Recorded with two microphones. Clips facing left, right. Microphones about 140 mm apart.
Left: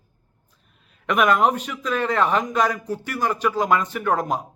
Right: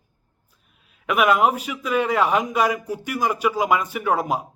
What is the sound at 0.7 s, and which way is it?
Speech, 5° right (ahead or behind).